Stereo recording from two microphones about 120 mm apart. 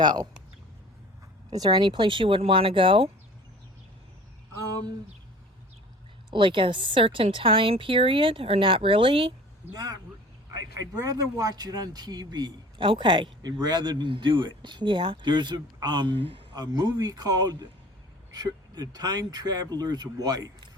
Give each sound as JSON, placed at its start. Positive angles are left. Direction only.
{"t": 0.0, "sound": "speech", "side_deg": -35}
{"t": 1.5, "sound": "a woman's voice", "side_deg": -35}
{"t": 6.3, "sound": "a woman's voice", "side_deg": -45}
{"t": 9.7, "sound": "speech", "side_deg": -35}